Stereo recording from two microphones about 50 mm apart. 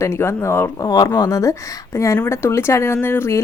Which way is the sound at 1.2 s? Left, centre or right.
Left.